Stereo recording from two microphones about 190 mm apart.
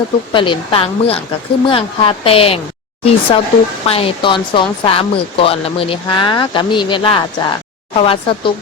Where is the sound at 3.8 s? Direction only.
30° left (ahead or behind).